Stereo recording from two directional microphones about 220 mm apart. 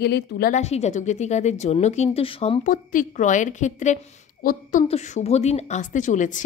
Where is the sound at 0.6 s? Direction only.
30° left (ahead or behind).